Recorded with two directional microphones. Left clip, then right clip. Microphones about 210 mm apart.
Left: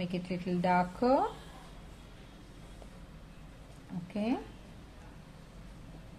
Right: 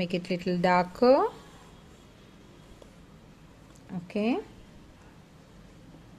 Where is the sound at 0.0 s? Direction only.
45° right (ahead or behind).